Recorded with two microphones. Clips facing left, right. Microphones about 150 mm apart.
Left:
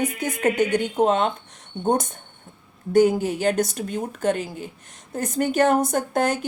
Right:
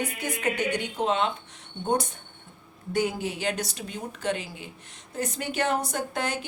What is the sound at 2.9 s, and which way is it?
A woman's voice, 45° left (ahead or behind).